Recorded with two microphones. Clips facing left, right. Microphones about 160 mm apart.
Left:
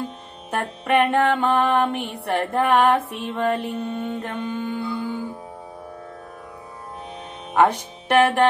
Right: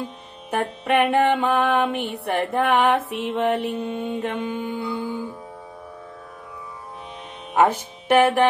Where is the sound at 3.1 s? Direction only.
85° right.